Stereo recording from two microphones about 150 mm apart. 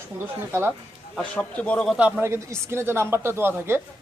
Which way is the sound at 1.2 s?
10° left (ahead or behind).